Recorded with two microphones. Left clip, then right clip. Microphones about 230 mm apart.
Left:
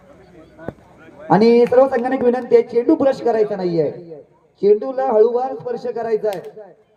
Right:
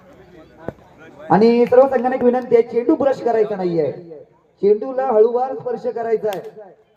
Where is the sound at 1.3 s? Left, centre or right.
Left.